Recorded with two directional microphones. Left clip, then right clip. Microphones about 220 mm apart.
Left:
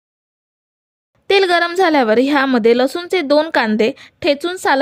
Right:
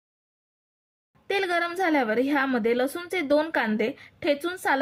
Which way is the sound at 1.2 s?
45° left (ahead or behind).